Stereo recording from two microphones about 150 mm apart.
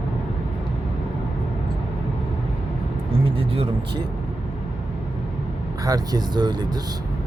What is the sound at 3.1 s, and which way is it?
Speech, 40° right (ahead or behind).